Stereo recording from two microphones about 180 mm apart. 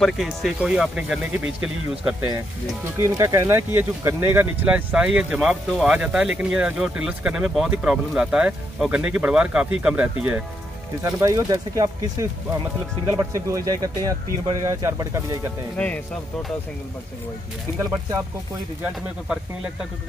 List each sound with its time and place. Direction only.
0.0 s speech: centre (ahead or behind)
3.0 s speech: 15° right (ahead or behind)
11.0 s speech: 20° right (ahead or behind)